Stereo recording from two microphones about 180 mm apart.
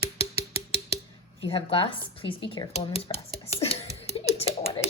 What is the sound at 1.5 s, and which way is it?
Speech, 30° left (ahead or behind).